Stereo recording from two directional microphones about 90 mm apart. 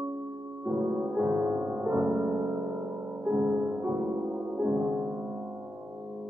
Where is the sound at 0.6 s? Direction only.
20° right (ahead or behind).